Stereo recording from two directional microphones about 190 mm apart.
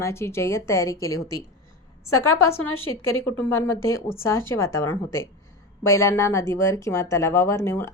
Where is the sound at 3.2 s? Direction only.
10° left (ahead or behind).